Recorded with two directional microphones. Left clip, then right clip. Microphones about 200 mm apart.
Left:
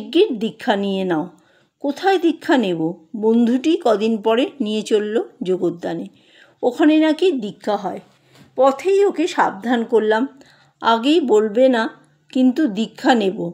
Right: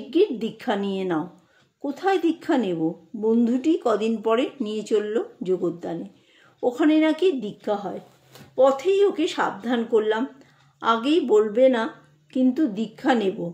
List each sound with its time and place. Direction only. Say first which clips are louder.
0.1 s a woman's voice: left 5 dB; 45° left (ahead or behind)